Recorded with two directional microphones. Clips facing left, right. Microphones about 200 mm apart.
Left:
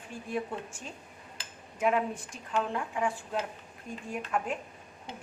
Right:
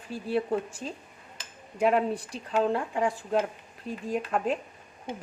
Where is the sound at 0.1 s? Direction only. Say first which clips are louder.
Right 7 dB; 35° right (ahead or behind).